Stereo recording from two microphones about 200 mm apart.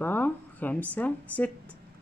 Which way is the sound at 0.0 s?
10° left (ahead or behind).